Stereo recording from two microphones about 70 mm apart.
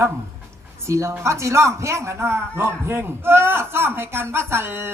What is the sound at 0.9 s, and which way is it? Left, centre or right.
A man's voice, right.